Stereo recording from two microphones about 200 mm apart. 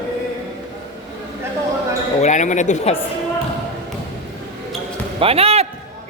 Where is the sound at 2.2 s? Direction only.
35° left (ahead or behind).